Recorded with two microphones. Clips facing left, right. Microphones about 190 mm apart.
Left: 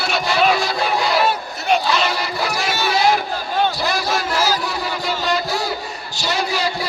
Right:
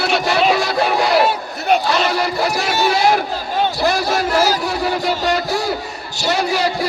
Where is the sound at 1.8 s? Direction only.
50° right (ahead or behind).